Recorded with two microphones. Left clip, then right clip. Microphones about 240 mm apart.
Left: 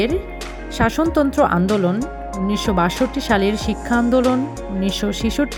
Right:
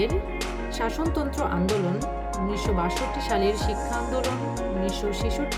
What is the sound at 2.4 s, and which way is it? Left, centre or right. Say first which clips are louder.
Speech: left 9 dB; left.